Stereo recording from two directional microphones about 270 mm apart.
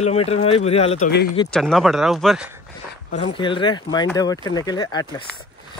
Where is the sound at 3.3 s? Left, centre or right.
Centre.